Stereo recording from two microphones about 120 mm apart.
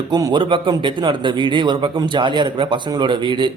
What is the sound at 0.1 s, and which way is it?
A man's voice, 35° right (ahead or behind).